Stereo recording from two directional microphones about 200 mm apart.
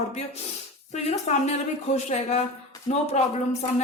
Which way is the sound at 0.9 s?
35° left (ahead or behind).